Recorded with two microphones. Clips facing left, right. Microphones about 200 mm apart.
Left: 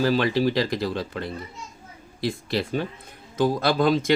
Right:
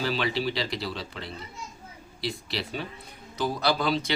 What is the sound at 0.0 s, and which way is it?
Speech, 50° left (ahead or behind).